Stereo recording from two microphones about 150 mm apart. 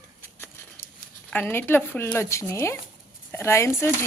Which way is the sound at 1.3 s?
15° left (ahead or behind).